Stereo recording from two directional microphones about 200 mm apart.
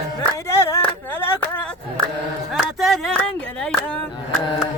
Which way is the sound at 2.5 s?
Centre (ahead or behind).